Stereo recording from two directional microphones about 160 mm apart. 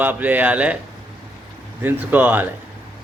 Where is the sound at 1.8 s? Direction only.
10° right (ahead or behind).